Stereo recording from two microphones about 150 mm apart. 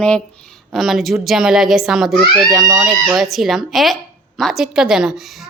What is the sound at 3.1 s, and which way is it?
A woman's voice, centre (ahead or behind).